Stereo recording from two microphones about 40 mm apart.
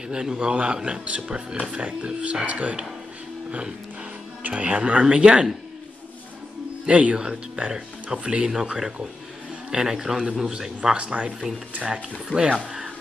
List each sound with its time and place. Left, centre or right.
0.1 s speech: centre
2.4 s speech: right
4.4 s speech: right
6.9 s speech: right
7.2 s a man's voice: centre